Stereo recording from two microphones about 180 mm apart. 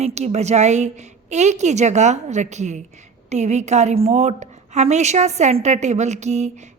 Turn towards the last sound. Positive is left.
turn(degrees=-40)  # may be behind; listen again after turning